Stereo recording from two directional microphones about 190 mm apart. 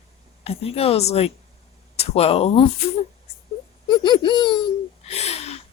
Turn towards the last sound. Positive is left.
turn(degrees=35)  # may be behind; listen again after turning